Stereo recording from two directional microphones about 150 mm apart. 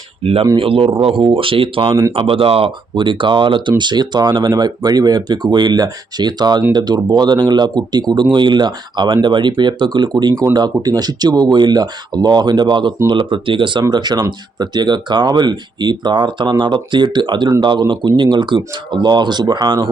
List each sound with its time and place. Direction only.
0.2 s speech: 40° right (ahead or behind)